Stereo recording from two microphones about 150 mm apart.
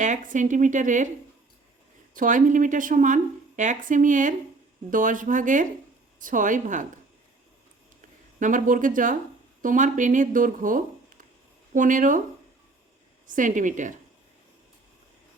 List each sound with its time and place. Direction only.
0.0 s a woman's voice: 60° right (ahead or behind)
2.1 s a woman's voice: 60° right (ahead or behind)
8.4 s a woman's voice: 60° right (ahead or behind)
13.2 s a woman's voice: 60° right (ahead or behind)